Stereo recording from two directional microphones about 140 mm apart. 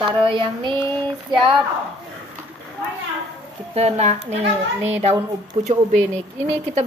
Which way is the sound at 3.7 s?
50° right (ahead or behind).